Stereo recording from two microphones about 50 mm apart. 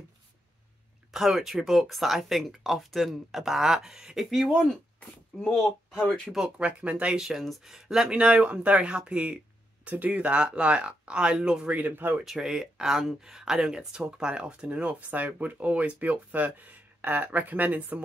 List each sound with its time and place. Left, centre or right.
1.1 s speech: centre
5.4 s speech: centre
6.6 s speech: right
7.2 s speech: centre
8.1 s speech: right
8.9 s speech: right
11.7 s speech: right
12.3 s speech: centre; by 18.0 s right